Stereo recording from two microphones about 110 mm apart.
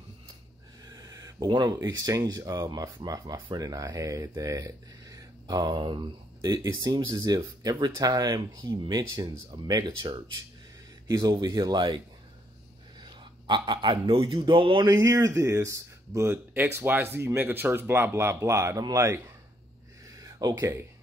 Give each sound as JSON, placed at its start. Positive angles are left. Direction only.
{"t": 0.8, "sound": "speech", "side_deg": -35}
{"t": 13.2, "sound": "speech", "side_deg": -45}
{"t": 14.9, "sound": "speech", "side_deg": -30}
{"t": 20.2, "sound": "a sound", "side_deg": -35}
{"t": 20.5, "sound": "speech", "side_deg": -25}